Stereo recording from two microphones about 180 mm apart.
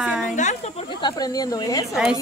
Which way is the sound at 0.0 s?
5° right (ahead or behind).